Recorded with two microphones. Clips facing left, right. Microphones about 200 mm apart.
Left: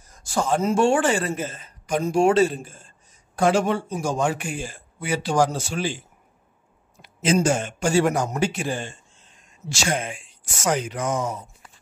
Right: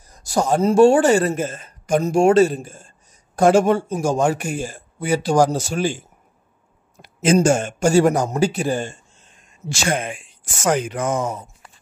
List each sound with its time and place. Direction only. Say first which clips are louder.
0.1 s a man's voice: right 4 dB; 40° right (ahead or behind)
9.7 s speech: right 3 dB; 55° right (ahead or behind)